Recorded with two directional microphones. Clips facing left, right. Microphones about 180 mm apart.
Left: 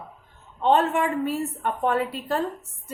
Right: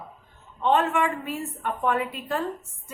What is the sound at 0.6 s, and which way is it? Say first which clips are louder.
A woman's voice: left 2 dB; 35° left (ahead or behind).